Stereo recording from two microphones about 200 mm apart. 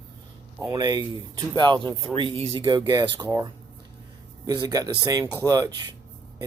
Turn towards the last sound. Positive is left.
turn(degrees=-20)  # may be behind; listen again after turning